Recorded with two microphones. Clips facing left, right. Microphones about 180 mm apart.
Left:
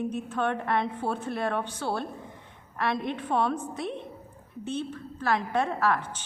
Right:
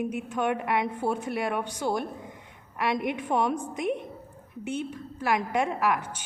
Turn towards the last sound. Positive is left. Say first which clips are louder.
# even
turn(degrees=-10)  # may be behind; listen again after turning